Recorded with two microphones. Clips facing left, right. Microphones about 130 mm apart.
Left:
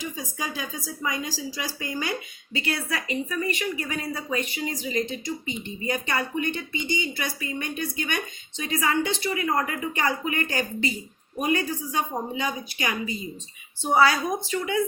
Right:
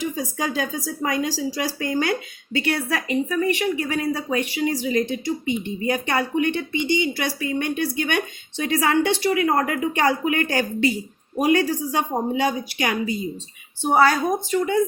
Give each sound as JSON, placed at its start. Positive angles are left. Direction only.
{"t": 0.3, "sound": "speech", "side_deg": -75}
{"t": 13.9, "sound": "a woman's voice", "side_deg": -45}